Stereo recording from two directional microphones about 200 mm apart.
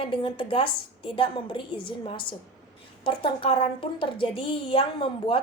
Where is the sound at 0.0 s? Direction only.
25° left (ahead or behind).